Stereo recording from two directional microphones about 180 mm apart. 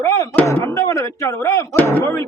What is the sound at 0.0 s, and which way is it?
Speech, 15° left (ahead or behind).